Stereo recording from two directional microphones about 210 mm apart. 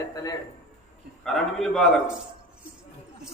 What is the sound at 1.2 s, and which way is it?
Speech, centre (ahead or behind).